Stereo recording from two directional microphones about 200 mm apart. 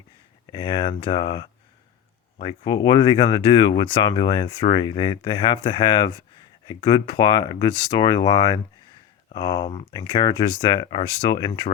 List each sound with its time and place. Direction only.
0.4 s speech: 25° left (ahead or behind)